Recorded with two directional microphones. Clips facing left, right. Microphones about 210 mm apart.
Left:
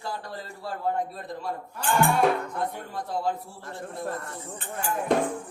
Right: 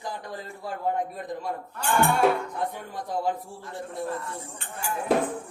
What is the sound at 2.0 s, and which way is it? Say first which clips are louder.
Music: even; centre (ahead or behind).